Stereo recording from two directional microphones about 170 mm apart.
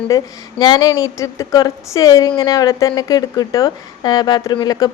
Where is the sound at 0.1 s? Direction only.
20° left (ahead or behind).